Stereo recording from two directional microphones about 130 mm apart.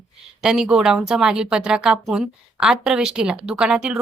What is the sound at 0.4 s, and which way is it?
A woman's voice, 5° right (ahead or behind).